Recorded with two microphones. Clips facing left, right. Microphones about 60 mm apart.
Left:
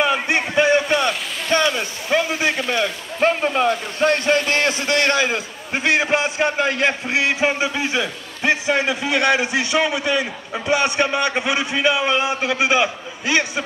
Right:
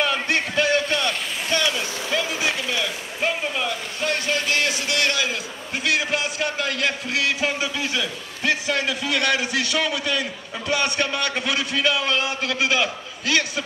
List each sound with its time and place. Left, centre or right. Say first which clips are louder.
0.0 s speech: left 3 dB; left